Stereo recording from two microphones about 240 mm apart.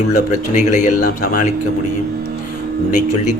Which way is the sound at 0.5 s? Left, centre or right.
Left.